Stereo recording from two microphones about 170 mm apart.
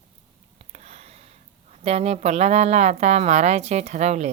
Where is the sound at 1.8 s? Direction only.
35° right (ahead or behind).